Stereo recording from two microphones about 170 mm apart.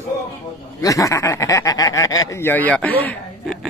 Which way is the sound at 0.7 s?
20° left (ahead or behind).